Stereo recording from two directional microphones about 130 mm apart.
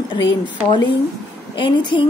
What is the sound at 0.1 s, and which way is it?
A woman's voice, 35° left (ahead or behind).